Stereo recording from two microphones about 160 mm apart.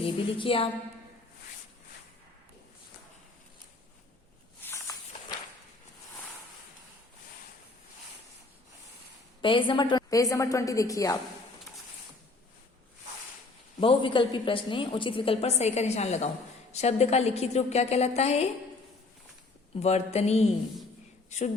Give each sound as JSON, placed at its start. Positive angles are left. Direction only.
{"t": 0.0, "sound": "a woman's voice", "side_deg": 35}
{"t": 4.6, "sound": "walk", "side_deg": 20}
{"t": 9.4, "sound": "a woman's voice", "side_deg": 30}
{"t": 13.7, "sound": "a woman's voice", "side_deg": 30}
{"t": 19.7, "sound": "a woman's voice", "side_deg": 40}